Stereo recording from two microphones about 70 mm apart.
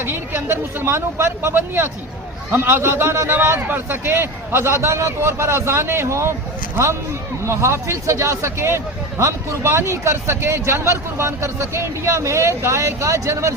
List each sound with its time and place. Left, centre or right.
0.0 s speech: right
7.4 s speech: right